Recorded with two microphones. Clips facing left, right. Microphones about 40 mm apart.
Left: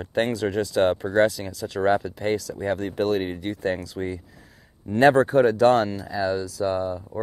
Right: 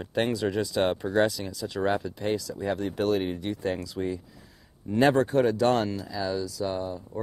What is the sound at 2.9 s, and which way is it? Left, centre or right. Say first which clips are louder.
Speech: left 2 dB; left.